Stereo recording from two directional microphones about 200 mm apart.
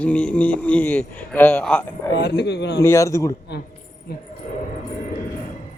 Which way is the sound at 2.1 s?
60° left (ahead or behind).